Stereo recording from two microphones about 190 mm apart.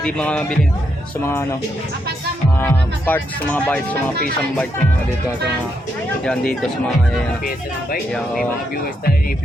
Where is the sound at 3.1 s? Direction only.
10° left (ahead or behind).